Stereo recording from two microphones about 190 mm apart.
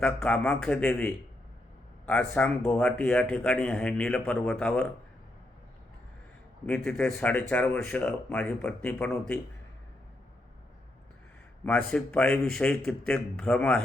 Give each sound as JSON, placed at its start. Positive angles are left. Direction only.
{"t": 0.0, "sound": "speech", "side_deg": 5}
{"t": 6.7, "sound": "speech", "side_deg": 5}
{"t": 11.6, "sound": "speech", "side_deg": 5}